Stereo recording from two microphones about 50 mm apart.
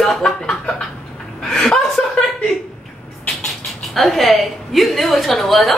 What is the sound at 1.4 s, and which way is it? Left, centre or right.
Speech, centre.